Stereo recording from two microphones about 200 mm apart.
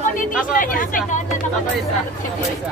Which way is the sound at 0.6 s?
40° left (ahead or behind).